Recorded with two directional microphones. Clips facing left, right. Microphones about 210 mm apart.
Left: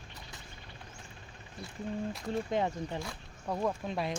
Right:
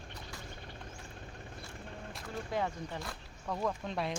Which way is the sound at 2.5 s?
20° left (ahead or behind).